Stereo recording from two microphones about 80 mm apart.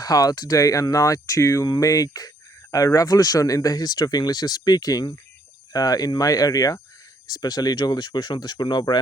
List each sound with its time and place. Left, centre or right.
0.0 s speech: left